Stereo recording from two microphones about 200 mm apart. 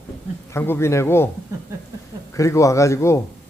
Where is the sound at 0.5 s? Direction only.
10° left (ahead or behind).